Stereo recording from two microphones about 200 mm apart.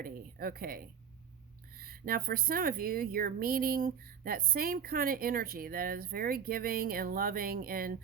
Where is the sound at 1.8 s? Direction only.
45° right (ahead or behind).